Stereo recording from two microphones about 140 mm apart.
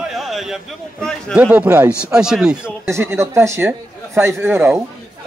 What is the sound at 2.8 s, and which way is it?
Speech, 20° right (ahead or behind).